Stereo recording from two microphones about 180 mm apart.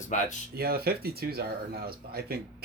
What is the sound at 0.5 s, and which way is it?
Speech, 60° right (ahead or behind).